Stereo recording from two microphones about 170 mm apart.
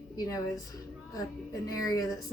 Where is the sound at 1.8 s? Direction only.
20° left (ahead or behind).